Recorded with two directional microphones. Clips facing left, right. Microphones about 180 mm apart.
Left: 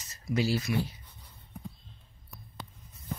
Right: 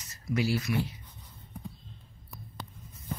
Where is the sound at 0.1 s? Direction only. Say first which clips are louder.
Even; 25° left (ahead or behind).